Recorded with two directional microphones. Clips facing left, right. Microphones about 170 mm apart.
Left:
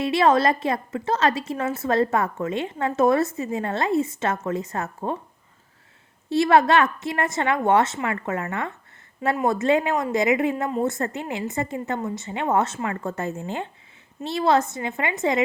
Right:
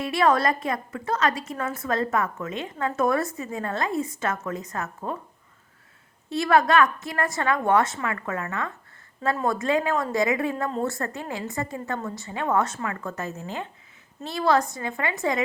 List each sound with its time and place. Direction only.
0.0 s a woman's voice: 25° left (ahead or behind)
6.3 s a woman's voice: 25° left (ahead or behind)